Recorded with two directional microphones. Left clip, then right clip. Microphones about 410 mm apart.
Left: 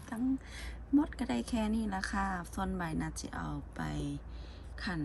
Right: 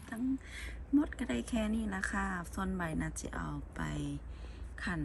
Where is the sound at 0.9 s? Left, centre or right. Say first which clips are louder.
Left 1 dB; centre.